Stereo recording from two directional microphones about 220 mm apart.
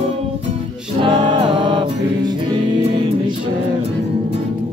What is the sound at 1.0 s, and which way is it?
Music, 20° right (ahead or behind).